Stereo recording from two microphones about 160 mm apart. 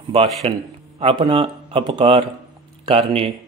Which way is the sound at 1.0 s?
35° right (ahead or behind).